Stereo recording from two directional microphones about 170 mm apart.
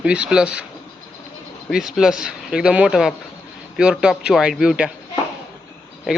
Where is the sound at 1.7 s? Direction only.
5° right (ahead or behind).